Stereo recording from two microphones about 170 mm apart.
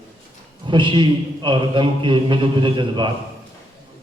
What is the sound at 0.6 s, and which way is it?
A man's voice, 30° right (ahead or behind).